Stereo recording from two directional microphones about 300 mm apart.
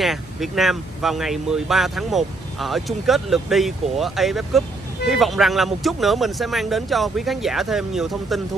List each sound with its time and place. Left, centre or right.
0.0 s speech: centre